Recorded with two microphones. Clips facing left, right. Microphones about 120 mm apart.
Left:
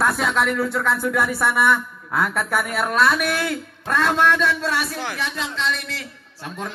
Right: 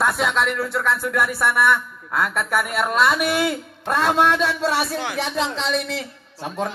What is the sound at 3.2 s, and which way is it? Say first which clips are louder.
A woman's voice: right 2 dB; 20° right (ahead or behind).